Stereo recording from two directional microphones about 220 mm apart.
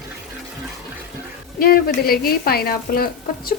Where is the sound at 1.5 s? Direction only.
45° left (ahead or behind).